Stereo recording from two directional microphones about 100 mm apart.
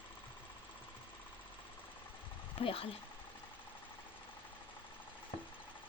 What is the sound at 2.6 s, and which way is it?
Speech, 70° left (ahead or behind).